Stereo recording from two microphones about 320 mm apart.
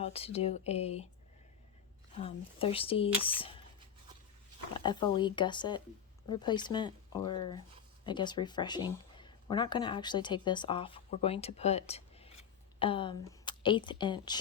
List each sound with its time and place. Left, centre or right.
0.0 s speech: centre
2.2 s speech: centre
4.8 s speech: centre